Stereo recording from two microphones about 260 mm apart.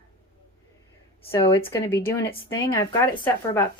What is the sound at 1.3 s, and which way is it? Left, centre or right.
A woman's voice, centre.